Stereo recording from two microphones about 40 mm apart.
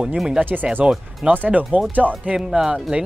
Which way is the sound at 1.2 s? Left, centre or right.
Right.